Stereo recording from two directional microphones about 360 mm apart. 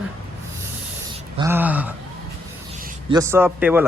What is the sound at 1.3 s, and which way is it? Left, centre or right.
A man's voice, centre.